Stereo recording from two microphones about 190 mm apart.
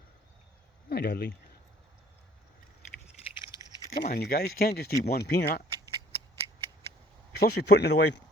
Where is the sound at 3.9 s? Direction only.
40° left (ahead or behind).